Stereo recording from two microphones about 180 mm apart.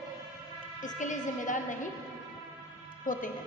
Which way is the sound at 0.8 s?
45° left (ahead or behind).